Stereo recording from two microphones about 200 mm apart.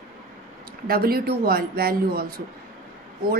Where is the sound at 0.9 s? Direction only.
50° right (ahead or behind).